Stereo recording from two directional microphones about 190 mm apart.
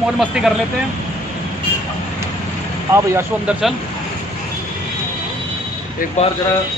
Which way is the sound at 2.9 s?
15° right (ahead or behind).